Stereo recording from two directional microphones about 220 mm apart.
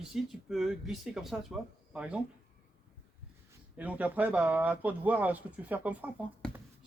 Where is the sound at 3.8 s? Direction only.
5° right (ahead or behind).